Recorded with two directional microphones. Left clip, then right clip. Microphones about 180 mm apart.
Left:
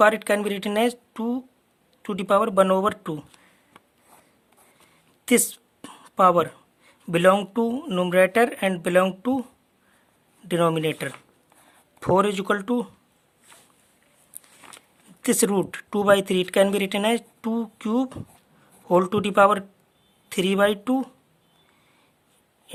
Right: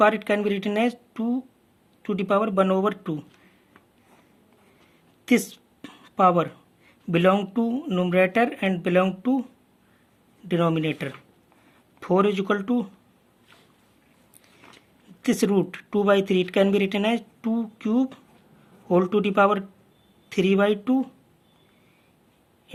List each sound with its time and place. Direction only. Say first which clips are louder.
0.0 s speech: left 1 dB; 40° left (ahead or behind)
5.2 s a woman's voice: left 2 dB; 40° left (ahead or behind)
10.5 s speech: left 2 dB; 40° left (ahead or behind)
14.6 s a sound: left 4 dB; 35° left (ahead or behind)
15.2 s speech: left 1 dB; 40° left (ahead or behind)